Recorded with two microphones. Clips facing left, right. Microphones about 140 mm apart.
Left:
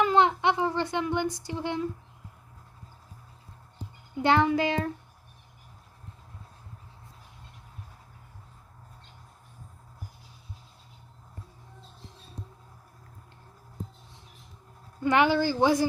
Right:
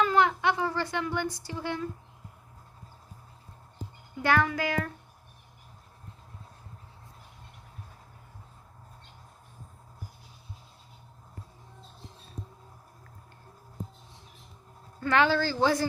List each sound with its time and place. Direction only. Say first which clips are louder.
0.0 s speech: left 2 dB; 20° left (ahead or behind)
4.2 s a child's voice: left 3 dB; 20° left (ahead or behind)
15.0 s speech: left 2 dB; 15° left (ahead or behind)